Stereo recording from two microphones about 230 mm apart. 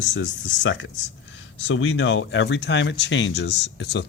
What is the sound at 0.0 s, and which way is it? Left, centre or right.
Speech, left.